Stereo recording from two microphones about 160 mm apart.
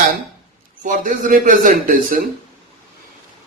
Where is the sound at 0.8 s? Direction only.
55° right (ahead or behind).